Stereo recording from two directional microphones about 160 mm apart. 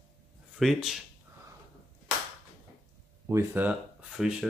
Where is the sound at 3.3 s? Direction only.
15° right (ahead or behind).